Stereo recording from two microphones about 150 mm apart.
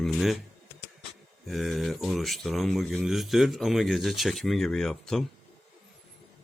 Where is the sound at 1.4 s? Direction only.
Centre (ahead or behind).